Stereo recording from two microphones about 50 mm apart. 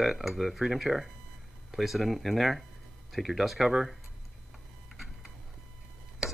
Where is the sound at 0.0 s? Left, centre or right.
Centre.